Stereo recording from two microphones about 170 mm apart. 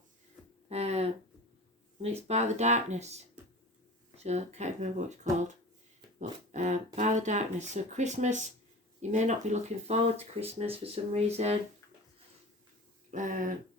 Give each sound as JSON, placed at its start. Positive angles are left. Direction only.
{"t": 0.7, "sound": "a sound", "side_deg": -40}
{"t": 2.0, "sound": "speech", "side_deg": -40}
{"t": 13.1, "sound": "speech", "side_deg": -50}